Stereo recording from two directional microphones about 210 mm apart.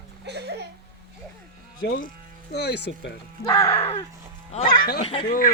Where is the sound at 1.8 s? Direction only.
45° left (ahead or behind).